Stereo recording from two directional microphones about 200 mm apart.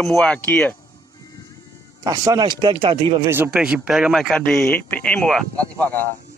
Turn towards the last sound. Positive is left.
turn(degrees=10)  # may be behind; listen again after turning